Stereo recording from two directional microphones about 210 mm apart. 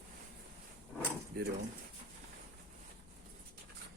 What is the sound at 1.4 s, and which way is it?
Dishes, 45° right (ahead or behind).